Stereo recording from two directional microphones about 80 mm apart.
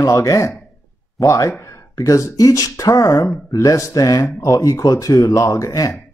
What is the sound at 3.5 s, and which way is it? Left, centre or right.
Speech, left.